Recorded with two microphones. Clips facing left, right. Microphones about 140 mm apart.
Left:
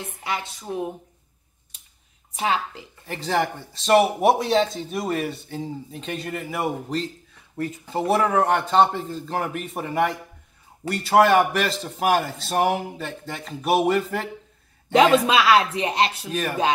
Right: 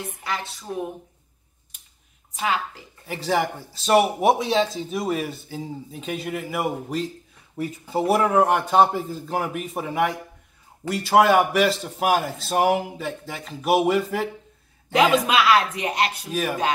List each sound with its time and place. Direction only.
0.2 s speech: 20° left (ahead or behind)
2.4 s speech: 25° left (ahead or behind)
3.1 s speech: 5° right (ahead or behind)
15.2 s speech: 30° left (ahead or behind)
16.3 s speech: 5° right (ahead or behind)